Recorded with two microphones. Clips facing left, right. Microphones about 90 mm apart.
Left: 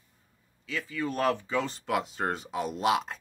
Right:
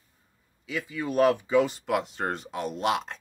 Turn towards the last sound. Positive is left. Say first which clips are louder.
# even
turn(degrees=0)  # may be behind; listen again after turning